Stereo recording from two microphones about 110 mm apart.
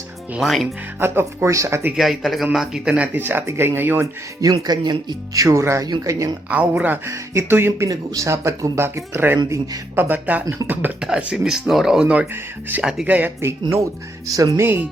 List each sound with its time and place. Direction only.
0.3 s speech: centre (ahead or behind)
0.9 s speech: 20° right (ahead or behind)
2.0 s speech: centre (ahead or behind); by 4.1 s 20° right (ahead or behind)
4.6 s speech: 40° right (ahead or behind)
6.5 s speech: 15° right (ahead or behind)
12.8 s speech: 5° right (ahead or behind)
14.3 s speech: 30° right (ahead or behind)